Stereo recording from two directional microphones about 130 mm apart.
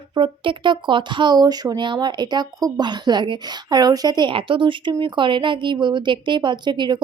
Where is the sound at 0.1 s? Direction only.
40° right (ahead or behind).